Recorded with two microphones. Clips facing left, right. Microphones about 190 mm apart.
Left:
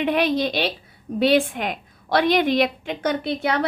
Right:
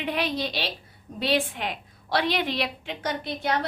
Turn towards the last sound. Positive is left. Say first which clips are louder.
# left 5 dB
turn(degrees=65)  # may be behind; listen again after turning